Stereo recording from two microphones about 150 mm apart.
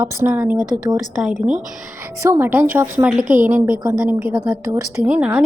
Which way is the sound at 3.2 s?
65° right (ahead or behind).